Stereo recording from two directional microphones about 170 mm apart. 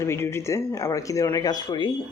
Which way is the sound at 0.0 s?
15° left (ahead or behind).